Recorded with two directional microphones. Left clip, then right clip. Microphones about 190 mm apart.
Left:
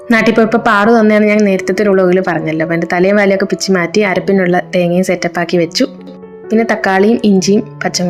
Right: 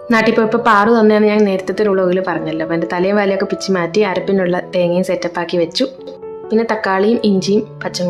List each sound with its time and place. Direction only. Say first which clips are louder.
0.1 s speech: left 3 dB; 15° left (ahead or behind)